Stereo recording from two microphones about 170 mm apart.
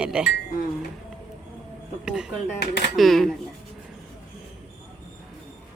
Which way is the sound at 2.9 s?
Centre (ahead or behind).